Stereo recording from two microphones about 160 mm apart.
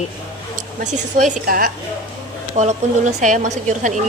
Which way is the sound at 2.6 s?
45° right (ahead or behind).